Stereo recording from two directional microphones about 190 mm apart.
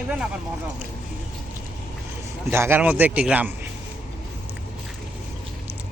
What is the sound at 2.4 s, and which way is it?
Speech, 15° right (ahead or behind).